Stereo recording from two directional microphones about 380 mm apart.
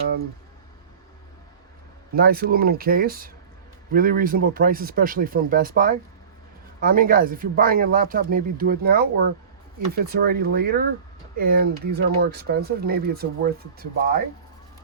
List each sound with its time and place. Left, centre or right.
2.1 s speech: right